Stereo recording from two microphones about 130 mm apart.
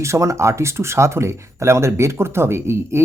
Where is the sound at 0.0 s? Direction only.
25° right (ahead or behind).